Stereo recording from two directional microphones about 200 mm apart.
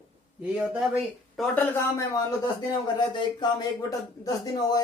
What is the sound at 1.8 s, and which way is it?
Speech, 15° left (ahead or behind).